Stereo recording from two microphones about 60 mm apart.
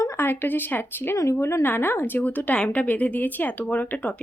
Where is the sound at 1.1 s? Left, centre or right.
Left.